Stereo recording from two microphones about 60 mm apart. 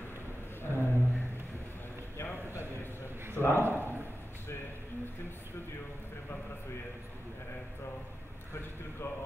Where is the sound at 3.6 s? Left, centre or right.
Right.